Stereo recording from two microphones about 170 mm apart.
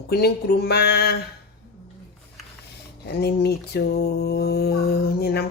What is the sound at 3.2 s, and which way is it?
Mantra, 70° left (ahead or behind).